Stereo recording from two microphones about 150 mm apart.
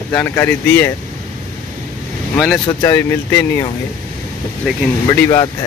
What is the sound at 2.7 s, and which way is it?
Speech, 20° left (ahead or behind).